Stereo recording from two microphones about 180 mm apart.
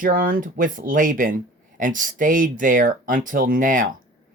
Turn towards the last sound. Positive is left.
turn(degrees=-45)  # may be behind; listen again after turning